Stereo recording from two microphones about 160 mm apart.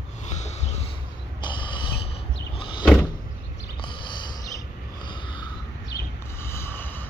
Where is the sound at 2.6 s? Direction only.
30° left (ahead or behind).